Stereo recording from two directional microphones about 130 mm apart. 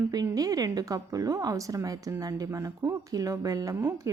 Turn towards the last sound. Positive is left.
turn(degrees=-20)  # may be behind; listen again after turning